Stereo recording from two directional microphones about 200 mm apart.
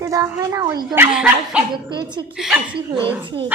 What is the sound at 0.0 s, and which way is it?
A woman's voice, 15° right (ahead or behind).